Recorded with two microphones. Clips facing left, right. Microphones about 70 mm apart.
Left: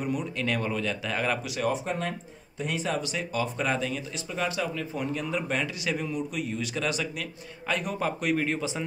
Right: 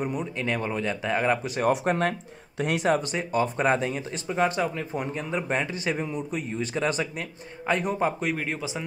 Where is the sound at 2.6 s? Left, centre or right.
Right.